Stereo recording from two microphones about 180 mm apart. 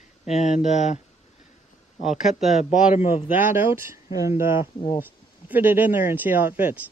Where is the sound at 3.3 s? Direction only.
10° right (ahead or behind).